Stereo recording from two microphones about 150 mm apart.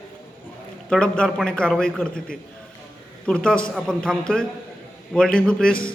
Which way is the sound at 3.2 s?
5° left (ahead or behind).